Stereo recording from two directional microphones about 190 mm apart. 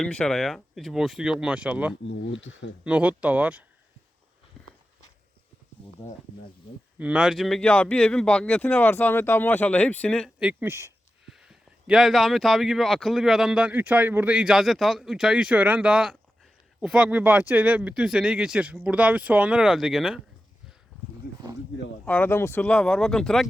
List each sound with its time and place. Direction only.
0.0 s speech: 5° left (ahead or behind)
2.0 s speech: 75° left (ahead or behind)
2.8 s speech: 5° right (ahead or behind)
7.0 s speech: 5° right (ahead or behind)
11.3 s speech: 5° right (ahead or behind)
22.0 s speech: 10° left (ahead or behind)